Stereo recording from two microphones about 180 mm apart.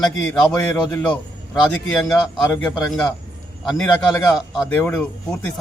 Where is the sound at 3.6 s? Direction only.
Centre (ahead or behind).